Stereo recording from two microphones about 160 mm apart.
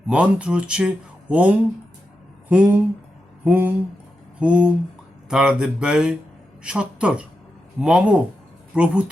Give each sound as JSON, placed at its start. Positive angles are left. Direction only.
{"t": 0.1, "sound": "speech", "side_deg": -5}
{"t": 4.4, "sound": "a sound", "side_deg": -5}
{"t": 5.3, "sound": "speech", "side_deg": -5}